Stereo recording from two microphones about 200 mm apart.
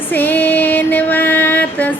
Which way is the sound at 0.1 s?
10° left (ahead or behind).